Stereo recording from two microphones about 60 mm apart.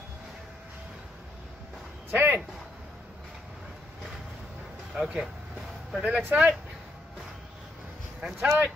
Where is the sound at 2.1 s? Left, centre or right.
Right.